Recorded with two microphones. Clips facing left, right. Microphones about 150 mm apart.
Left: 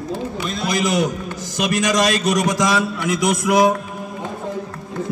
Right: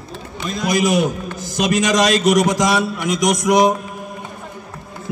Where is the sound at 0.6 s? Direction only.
15° right (ahead or behind).